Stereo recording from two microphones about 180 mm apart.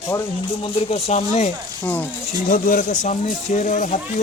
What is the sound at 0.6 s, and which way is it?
Speech, 35° left (ahead or behind).